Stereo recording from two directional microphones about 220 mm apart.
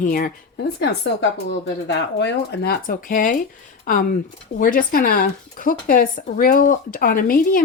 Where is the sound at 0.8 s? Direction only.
50° left (ahead or behind).